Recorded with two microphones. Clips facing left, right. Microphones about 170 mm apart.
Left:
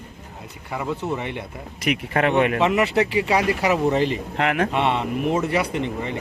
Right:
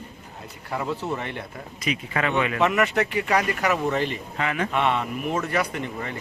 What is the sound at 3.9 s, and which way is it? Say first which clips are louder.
Speech: left 5 dB; 30° left (ahead or behind).